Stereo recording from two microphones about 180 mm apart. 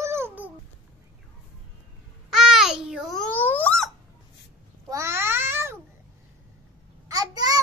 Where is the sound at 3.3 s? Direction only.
10° left (ahead or behind).